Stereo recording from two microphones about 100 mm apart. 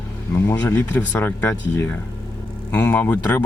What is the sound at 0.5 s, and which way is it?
Speech, 15° left (ahead or behind).